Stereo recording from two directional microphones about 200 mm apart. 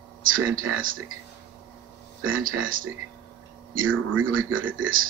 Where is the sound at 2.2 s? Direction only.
80° right.